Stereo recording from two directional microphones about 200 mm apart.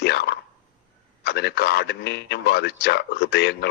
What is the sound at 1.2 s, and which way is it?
A man's voice, 55° left (ahead or behind).